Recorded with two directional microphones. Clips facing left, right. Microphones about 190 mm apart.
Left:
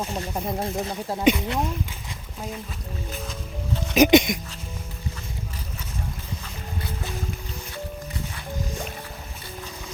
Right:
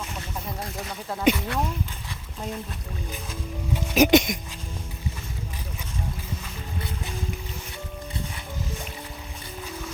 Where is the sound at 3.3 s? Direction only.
5° right (ahead or behind).